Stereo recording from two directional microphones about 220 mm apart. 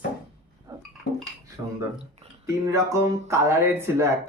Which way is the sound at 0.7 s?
20° right (ahead or behind).